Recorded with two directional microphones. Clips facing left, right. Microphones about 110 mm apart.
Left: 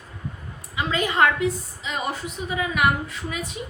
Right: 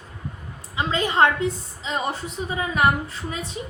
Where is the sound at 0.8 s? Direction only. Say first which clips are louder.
Right 1 dB; 30° right (ahead or behind).